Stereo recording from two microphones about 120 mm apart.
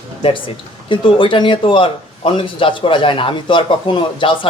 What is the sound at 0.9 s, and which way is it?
Speech, 45° left (ahead or behind).